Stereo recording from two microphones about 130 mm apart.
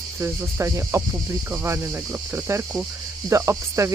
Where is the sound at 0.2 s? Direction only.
20° right (ahead or behind).